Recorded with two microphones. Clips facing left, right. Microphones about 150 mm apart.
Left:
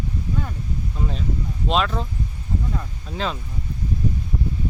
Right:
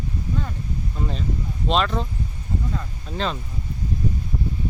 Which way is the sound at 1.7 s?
5° left (ahead or behind).